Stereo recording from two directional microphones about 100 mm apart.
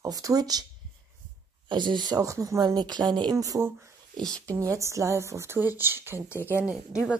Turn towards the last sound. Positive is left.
turn(degrees=-10)  # may be behind; listen again after turning